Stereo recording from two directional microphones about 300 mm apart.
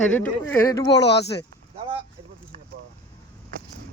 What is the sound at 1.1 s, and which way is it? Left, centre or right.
Speech, left.